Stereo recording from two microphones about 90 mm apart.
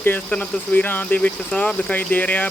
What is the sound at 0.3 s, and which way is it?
Speech, 15° left (ahead or behind).